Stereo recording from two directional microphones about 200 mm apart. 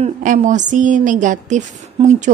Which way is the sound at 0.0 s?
40° right (ahead or behind).